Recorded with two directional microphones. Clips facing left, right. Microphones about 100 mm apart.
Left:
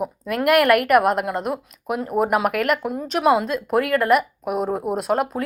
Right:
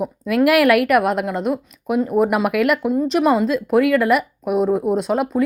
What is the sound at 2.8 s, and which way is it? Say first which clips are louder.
A woman's voice: right 3 dB; centre (ahead or behind).